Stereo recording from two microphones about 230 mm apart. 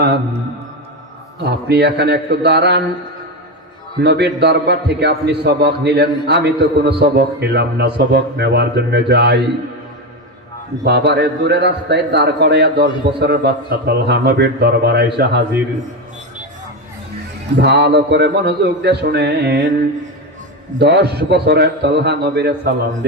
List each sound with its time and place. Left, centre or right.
1.5 s a man's voice: right
4.0 s a man's voice: right
10.8 s a man's voice: right
17.6 s a man's voice: right
20.7 s a man's voice: right